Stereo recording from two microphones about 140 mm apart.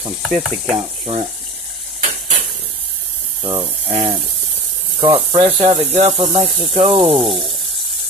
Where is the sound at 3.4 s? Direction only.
30° right (ahead or behind).